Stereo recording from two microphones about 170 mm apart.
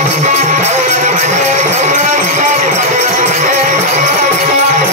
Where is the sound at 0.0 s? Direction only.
45° right (ahead or behind).